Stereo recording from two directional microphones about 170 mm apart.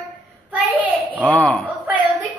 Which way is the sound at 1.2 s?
10° left (ahead or behind).